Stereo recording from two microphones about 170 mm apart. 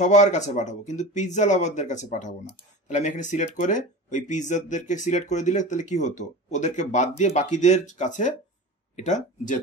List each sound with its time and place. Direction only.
0.0 s speech: 45° left (ahead or behind)